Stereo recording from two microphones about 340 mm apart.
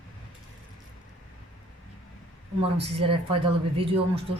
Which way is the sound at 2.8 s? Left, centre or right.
Centre.